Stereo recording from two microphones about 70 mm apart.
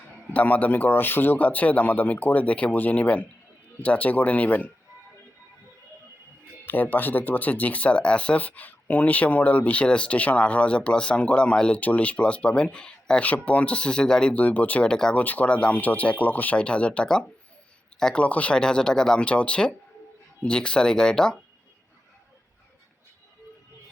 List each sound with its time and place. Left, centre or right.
0.3 s speech: left
6.7 s speech: left
14.3 s speech: left
14.8 s speech: centre
15.1 s speech: left